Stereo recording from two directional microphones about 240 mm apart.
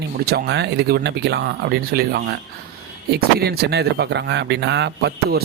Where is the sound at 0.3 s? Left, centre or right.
Right.